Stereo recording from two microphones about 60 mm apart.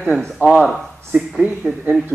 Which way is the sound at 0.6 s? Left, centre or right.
Centre.